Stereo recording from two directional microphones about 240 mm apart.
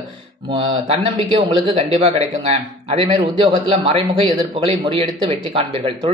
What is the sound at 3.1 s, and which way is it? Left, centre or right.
A man's voice, right.